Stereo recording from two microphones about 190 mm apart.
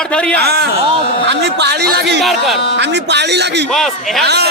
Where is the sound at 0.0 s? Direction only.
5° left (ahead or behind).